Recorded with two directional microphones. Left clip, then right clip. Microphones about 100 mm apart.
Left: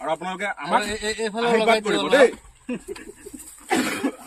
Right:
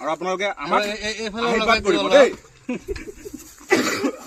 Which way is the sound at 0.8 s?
Centre (ahead or behind).